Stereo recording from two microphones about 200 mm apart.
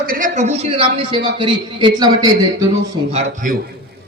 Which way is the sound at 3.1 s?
35° right (ahead or behind).